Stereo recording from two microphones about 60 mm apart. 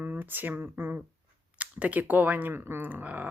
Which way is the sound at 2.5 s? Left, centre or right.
Right.